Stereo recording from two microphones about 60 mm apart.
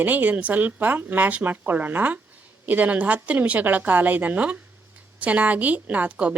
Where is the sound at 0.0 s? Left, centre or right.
Right.